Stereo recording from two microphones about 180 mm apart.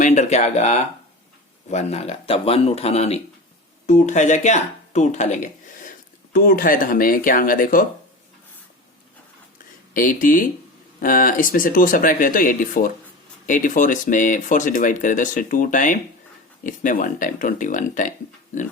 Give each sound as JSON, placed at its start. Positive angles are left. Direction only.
{"t": 0.0, "sound": "speech", "side_deg": 40}
{"t": 9.9, "sound": "speech", "side_deg": 50}